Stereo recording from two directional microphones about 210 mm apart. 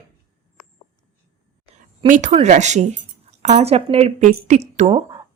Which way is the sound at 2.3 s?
35° right (ahead or behind).